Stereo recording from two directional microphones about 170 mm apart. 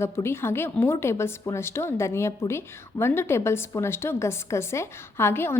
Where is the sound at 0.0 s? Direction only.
15° left (ahead or behind).